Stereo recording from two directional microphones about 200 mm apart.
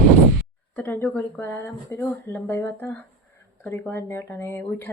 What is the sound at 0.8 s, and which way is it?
Speech, 5° left (ahead or behind).